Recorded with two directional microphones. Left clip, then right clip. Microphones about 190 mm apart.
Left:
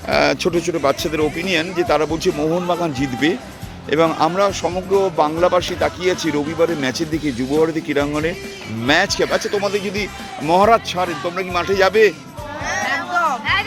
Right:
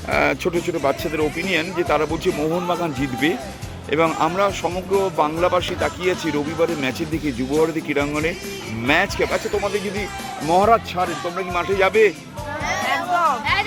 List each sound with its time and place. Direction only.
0.1 s speech: 35° left (ahead or behind)
10.5 s speech: 50° left (ahead or behind)
11.5 s speech: 35° left (ahead or behind)
12.8 s a sound: centre (ahead or behind)